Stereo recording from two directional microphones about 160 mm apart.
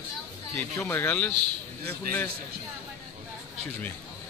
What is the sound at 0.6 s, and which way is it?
Speech, 15° left (ahead or behind).